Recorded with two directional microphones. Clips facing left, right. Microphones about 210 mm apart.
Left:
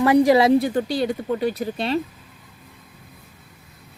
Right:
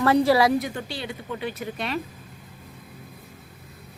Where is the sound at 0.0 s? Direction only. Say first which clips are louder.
Left 4 dB; 15° left (ahead or behind).